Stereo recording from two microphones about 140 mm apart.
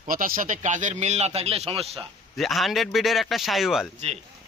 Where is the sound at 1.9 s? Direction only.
Centre (ahead or behind).